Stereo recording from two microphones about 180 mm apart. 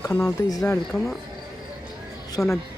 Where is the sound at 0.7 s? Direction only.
5° left (ahead or behind).